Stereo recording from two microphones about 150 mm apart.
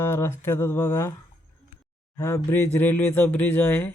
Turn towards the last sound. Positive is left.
turn(degrees=15)  # may be behind; listen again after turning